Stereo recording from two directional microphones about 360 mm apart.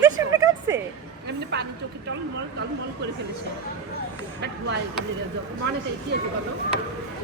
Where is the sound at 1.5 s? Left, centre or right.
Right.